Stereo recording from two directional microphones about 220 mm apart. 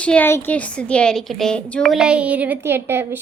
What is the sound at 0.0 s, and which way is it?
A woman's voice, 5° left (ahead or behind).